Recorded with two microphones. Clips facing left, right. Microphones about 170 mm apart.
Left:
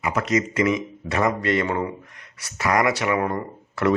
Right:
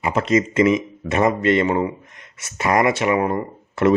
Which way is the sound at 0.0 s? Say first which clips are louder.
Right 4 dB; 25° right (ahead or behind).